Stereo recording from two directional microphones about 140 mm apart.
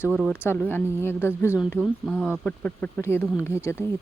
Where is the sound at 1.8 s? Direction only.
5° right (ahead or behind).